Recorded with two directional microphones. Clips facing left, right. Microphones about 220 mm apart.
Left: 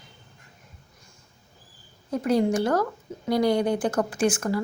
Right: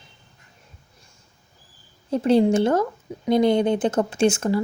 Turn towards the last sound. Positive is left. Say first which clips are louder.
# right 4 dB
turn(degrees=-25)  # may be behind; listen again after turning